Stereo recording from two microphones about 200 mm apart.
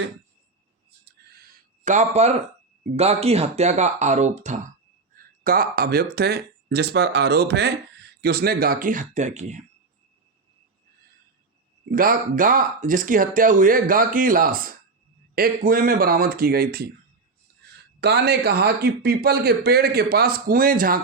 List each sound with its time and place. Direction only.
1.8 s speech: 35° right (ahead or behind)
11.9 s speech: 45° right (ahead or behind)
17.5 s a sound: 55° right (ahead or behind)
18.0 s speech: 55° right (ahead or behind)